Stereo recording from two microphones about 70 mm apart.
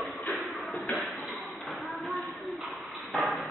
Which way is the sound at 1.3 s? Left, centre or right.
Centre.